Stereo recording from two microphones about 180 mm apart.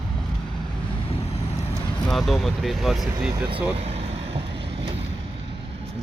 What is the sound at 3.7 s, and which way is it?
Vehicle, 35° right (ahead or behind).